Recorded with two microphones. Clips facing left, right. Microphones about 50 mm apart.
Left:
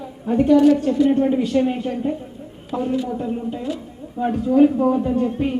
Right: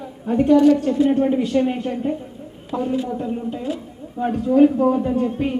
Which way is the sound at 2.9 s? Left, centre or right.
Centre.